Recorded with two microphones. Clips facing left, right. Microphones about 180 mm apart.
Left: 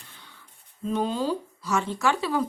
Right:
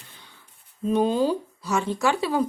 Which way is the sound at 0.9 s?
15° right (ahead or behind).